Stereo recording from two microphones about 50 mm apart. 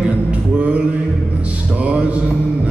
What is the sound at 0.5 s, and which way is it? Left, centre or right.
Music, right.